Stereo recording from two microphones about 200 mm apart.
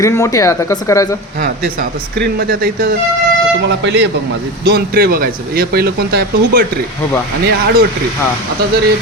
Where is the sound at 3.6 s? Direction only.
65° right (ahead or behind).